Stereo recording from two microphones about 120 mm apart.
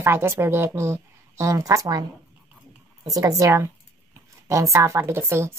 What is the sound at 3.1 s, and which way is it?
A woman's voice, 30° right (ahead or behind).